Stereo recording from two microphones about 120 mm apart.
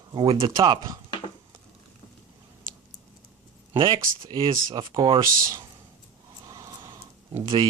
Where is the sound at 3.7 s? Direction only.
40° right (ahead or behind).